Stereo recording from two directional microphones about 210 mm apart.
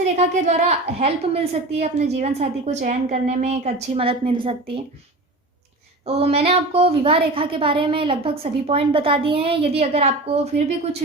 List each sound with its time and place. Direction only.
0.2 s a woman's voice: 35° right (ahead or behind)
6.1 s a woman's voice: 30° right (ahead or behind)